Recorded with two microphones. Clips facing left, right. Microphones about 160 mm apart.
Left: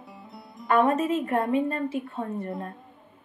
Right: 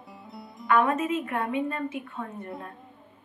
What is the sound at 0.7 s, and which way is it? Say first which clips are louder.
A woman's voice: left 2 dB; 40° left (ahead or behind).